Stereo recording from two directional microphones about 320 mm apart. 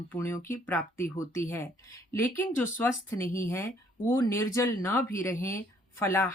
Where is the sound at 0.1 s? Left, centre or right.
Centre.